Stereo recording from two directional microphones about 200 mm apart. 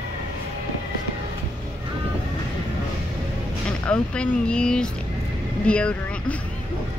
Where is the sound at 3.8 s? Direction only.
5° left (ahead or behind).